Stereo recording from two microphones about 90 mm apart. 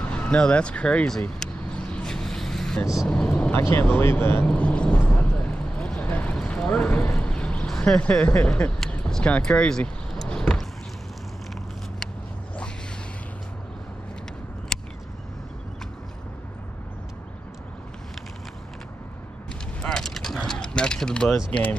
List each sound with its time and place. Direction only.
0.0 s speech: 15° left (ahead or behind)
1.4 s vehicle: 10° left (ahead or behind)
3.1 s speech: 15° left (ahead or behind)
3.5 s speech: 25° left (ahead or behind)
4.5 s a sound: 15° left (ahead or behind)
8.9 s vehicle: 10° left (ahead or behind)
14.7 s a sound: 5° left (ahead or behind)
19.9 s mechanisms: 5° left (ahead or behind)
21.5 s speech: 15° left (ahead or behind)